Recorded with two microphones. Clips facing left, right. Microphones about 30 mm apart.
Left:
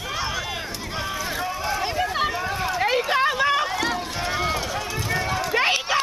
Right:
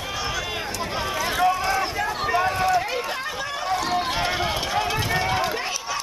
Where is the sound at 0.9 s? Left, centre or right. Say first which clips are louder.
Even; centre.